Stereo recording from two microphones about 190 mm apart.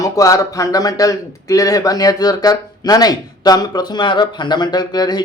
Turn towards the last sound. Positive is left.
turn(degrees=20)  # may be behind; listen again after turning